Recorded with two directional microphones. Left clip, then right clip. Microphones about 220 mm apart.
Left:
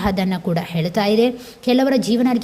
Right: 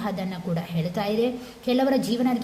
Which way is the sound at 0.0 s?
40° left (ahead or behind).